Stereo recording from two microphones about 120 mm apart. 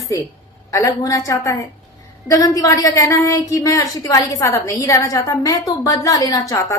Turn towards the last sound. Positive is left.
turn(degrees=25)  # may be behind; listen again after turning